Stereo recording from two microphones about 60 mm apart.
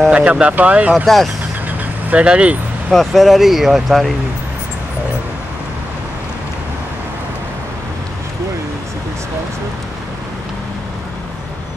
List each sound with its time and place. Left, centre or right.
0.1 s speech: right
1.0 s speech: centre
2.0 s speech: centre
2.9 s speech: centre